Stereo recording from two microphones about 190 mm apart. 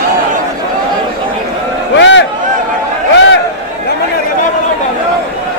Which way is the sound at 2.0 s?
70° left (ahead or behind).